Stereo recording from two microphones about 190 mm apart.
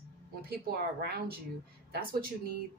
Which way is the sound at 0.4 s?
55° right (ahead or behind).